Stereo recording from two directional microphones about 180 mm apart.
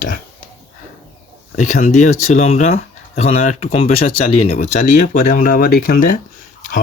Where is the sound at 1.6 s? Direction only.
40° left (ahead or behind).